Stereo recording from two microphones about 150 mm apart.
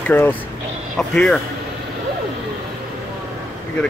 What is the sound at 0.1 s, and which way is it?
Speech, 10° left (ahead or behind).